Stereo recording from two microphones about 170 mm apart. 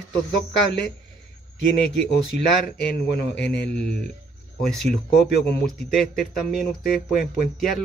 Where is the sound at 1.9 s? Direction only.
75° left (ahead or behind).